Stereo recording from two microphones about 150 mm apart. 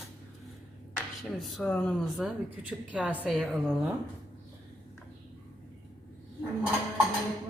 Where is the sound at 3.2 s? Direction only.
Centre (ahead or behind).